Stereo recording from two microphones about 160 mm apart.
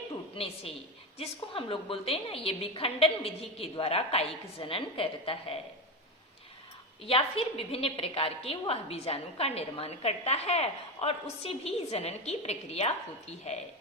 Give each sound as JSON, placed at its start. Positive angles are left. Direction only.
{"t": 0.3, "sound": "a woman's voice", "side_deg": 40}
{"t": 7.0, "sound": "a woman's voice", "side_deg": 35}